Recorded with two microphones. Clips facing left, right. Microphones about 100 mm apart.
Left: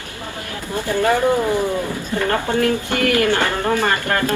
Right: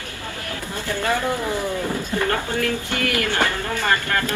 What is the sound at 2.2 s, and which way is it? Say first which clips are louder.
A woman's voice: left 7 dB; 45° left (ahead or behind).